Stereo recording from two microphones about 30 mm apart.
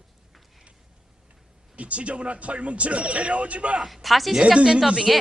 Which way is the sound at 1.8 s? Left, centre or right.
Right.